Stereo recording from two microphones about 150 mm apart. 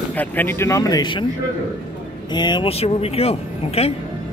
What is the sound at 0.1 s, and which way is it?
Speech, 10° left (ahead or behind).